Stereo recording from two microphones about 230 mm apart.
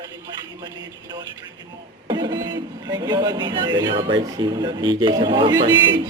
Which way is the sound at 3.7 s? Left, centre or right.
Right.